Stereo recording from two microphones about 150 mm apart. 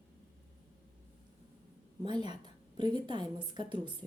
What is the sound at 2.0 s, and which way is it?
A woman's voice, 30° right (ahead or behind).